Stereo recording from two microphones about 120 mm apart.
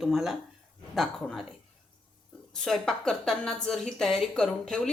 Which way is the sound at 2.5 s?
5° left (ahead or behind).